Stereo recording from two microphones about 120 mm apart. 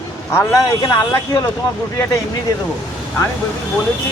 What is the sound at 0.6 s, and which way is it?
Speech, 30° left (ahead or behind).